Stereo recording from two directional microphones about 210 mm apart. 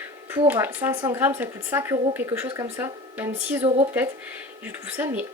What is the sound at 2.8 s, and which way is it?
Speech, 10° right (ahead or behind).